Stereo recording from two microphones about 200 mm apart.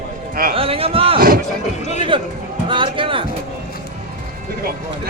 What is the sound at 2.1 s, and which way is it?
Speech, 25° right (ahead or behind).